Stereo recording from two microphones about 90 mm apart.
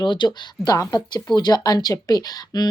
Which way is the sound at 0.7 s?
40° left (ahead or behind).